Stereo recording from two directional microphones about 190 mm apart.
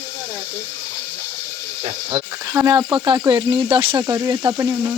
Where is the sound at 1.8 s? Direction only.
30° right (ahead or behind).